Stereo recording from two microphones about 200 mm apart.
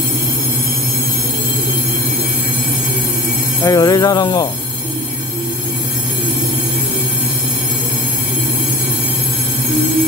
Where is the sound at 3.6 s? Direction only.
15° left (ahead or behind).